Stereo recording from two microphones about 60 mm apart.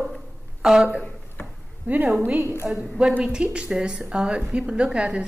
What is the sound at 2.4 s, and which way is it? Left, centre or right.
Speech, right.